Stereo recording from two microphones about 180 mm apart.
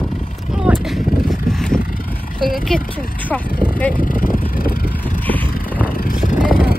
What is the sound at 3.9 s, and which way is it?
Vehicle, 50° left (ahead or behind).